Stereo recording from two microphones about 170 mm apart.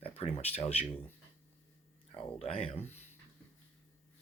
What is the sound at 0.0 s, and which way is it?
Speech, 35° left (ahead or behind).